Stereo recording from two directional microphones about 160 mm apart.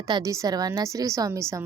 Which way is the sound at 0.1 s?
20° right (ahead or behind).